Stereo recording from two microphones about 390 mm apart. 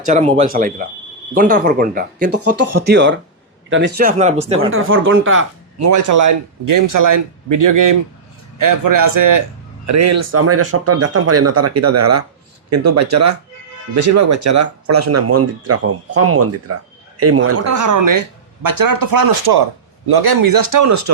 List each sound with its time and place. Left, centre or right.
0.0 s speech: centre
4.7 s speech: right
5.4 s speech: right
9.8 s speech: right